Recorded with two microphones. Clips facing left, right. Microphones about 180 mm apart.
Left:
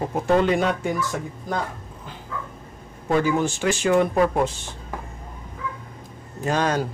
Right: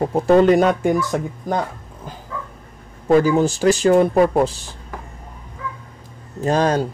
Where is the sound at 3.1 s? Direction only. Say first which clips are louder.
Right 6 dB; 35° right (ahead or behind).